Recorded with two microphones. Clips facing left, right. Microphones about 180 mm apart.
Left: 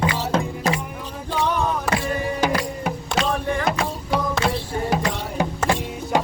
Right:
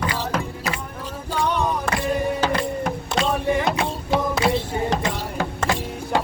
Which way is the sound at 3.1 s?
5° right (ahead or behind).